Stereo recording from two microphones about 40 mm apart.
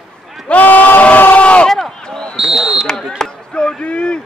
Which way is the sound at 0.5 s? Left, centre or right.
Left.